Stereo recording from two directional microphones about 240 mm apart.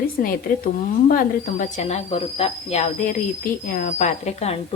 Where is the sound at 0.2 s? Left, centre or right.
Left.